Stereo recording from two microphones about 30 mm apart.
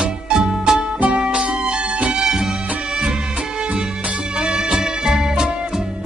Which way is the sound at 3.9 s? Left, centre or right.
Right.